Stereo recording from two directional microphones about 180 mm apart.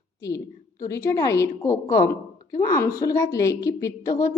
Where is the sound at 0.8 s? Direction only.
15° left (ahead or behind).